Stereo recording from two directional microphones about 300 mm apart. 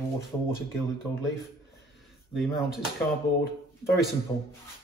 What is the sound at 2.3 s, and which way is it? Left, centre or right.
Speech, centre.